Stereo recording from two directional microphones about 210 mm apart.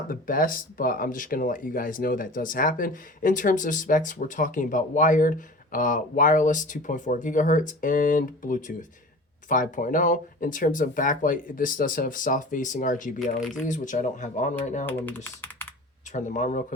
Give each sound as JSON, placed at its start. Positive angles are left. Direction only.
{"t": 0.1, "sound": "speech", "side_deg": 40}
{"t": 14.8, "sound": "speech", "side_deg": 10}
{"t": 16.1, "sound": "speech", "side_deg": 35}